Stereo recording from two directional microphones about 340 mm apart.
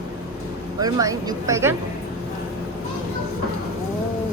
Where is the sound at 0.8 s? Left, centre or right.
Centre.